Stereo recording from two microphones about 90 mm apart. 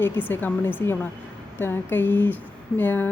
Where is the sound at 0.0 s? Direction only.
20° left (ahead or behind).